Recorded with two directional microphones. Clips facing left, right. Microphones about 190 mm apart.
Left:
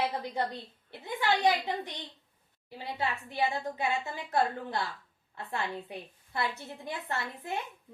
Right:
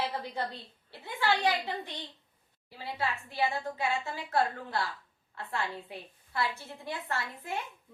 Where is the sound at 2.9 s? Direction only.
20° left (ahead or behind).